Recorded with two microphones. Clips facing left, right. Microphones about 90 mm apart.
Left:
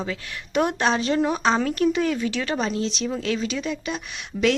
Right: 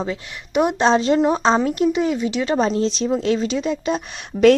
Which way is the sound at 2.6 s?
35° right (ahead or behind).